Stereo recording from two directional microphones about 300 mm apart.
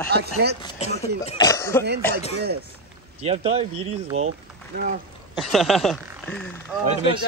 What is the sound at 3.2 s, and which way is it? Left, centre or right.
Speech, centre.